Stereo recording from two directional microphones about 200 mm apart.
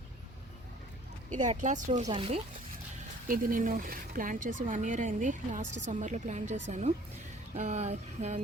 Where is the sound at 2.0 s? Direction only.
25° right (ahead or behind).